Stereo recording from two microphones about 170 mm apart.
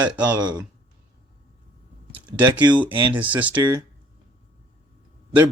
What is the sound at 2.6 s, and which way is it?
Speech, 25° right (ahead or behind).